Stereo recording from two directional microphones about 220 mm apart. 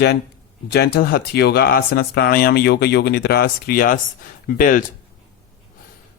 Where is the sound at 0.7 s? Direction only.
45° left (ahead or behind).